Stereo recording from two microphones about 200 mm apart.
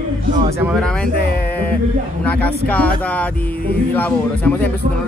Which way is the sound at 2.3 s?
10° left (ahead or behind).